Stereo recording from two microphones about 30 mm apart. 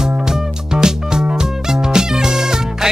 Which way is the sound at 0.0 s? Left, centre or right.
Centre.